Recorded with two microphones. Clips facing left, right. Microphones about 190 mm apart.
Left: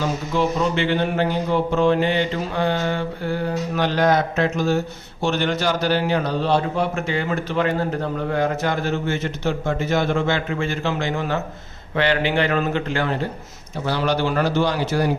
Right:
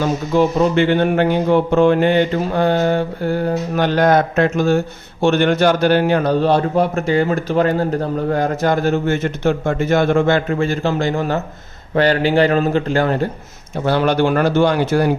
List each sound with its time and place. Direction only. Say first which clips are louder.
0.3 s mantra: right 7 dB; 50° right (ahead or behind)
11.9 s a man's voice: right 6 dB; 40° right (ahead or behind)
13.8 s a man's voice: right 6 dB; 55° right (ahead or behind)